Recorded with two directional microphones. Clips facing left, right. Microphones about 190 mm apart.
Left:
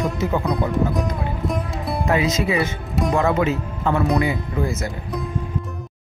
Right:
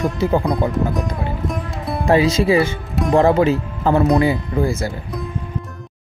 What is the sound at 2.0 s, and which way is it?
Speech, 30° right (ahead or behind).